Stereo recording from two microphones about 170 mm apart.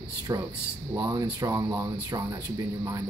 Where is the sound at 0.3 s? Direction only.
20° right (ahead or behind).